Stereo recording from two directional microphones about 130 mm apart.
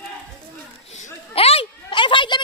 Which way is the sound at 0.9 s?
55° left (ahead or behind).